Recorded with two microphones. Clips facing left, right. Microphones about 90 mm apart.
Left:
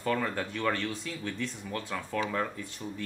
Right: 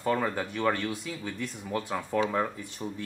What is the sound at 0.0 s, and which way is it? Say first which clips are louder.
Speech: right 2 dB; 15° right (ahead or behind).